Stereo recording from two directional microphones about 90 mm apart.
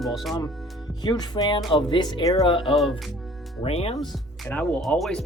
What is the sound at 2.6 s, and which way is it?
Speech, centre (ahead or behind).